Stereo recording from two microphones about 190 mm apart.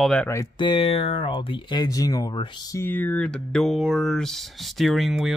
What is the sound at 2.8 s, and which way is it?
Speech, 10° left (ahead or behind).